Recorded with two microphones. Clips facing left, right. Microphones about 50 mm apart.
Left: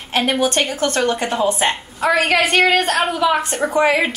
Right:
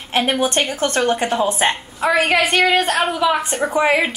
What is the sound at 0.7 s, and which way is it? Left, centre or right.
A woman's voice, right.